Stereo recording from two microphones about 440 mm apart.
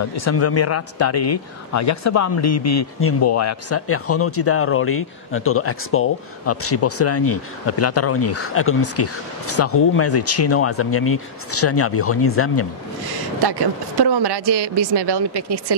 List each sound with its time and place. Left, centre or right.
0.1 s speech: left
13.4 s speech: right